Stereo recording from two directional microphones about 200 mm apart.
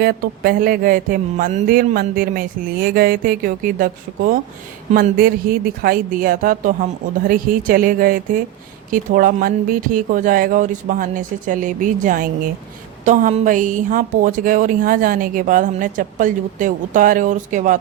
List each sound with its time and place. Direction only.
0.0 s a woman's voice: 50° right (ahead or behind)